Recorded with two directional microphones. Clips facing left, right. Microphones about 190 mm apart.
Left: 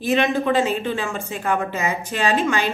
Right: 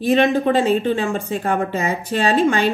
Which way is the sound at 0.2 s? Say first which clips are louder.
Right 3 dB; 35° right (ahead or behind).